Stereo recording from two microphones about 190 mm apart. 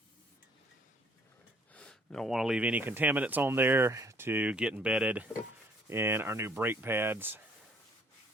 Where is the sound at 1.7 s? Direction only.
5° left (ahead or behind); by 7.4 s 10° right (ahead or behind).